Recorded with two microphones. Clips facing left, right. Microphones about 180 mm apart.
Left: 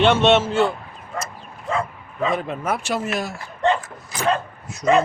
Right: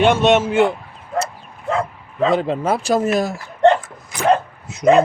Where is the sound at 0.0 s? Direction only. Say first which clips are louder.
Right 2 dB; 10° right (ahead or behind).